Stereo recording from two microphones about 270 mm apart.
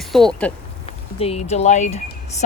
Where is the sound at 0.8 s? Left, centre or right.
Left.